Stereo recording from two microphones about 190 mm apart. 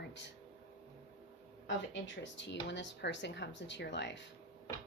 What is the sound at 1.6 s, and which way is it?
Speech, 75° left (ahead or behind).